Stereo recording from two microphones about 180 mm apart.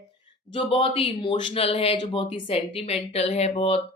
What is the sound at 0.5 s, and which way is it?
Speech, 30° left (ahead or behind).